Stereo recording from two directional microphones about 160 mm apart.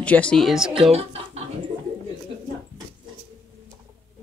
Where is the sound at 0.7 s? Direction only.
40° right (ahead or behind).